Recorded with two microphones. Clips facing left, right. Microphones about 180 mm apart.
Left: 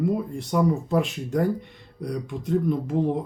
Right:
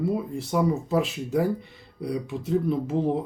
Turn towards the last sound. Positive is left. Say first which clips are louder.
# even
turn(degrees=-5)  # may be behind; listen again after turning